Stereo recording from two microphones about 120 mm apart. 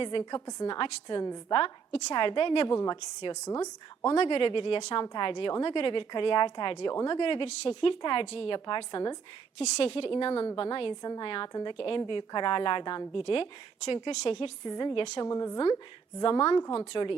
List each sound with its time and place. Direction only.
0.0 s a woman's voice: 40° left (ahead or behind)
1.5 s a woman's voice: 45° left (ahead or behind)
4.2 s a woman's voice: 45° left (ahead or behind)
7.2 s a woman's voice: 45° left (ahead or behind)
9.6 s a woman's voice: 50° left (ahead or behind); by 16.8 s 35° left (ahead or behind)
16.9 s a woman's voice: 45° left (ahead or behind)